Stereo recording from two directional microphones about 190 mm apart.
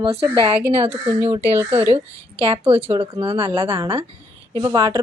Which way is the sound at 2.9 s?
25° right (ahead or behind).